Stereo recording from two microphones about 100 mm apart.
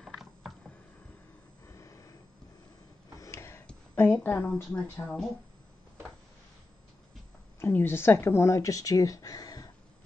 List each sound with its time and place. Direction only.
0.0 s mechanisms: centre (ahead or behind)
1.7 s vehicle: 30° left (ahead or behind)
3.2 s a sound: 30° left (ahead or behind)
4.1 s a woman's voice: 15° left (ahead or behind)
5.0 s a woman's voice: 5° left (ahead or behind)
7.6 s speech: 25° left (ahead or behind)